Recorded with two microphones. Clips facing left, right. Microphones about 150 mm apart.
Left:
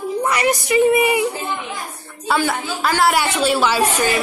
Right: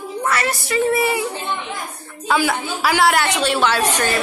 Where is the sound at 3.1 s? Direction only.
10° left (ahead or behind).